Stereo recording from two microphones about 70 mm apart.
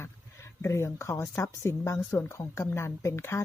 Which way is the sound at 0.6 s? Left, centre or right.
Left.